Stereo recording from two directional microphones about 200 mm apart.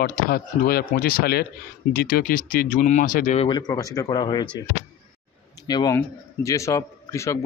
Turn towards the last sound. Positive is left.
turn(degrees=15)  # may be behind; listen again after turning